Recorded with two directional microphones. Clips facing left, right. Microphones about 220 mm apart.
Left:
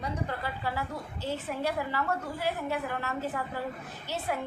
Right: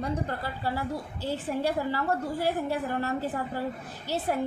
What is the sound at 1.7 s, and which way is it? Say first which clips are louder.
A woman's voice: right 2 dB; 30° right (ahead or behind).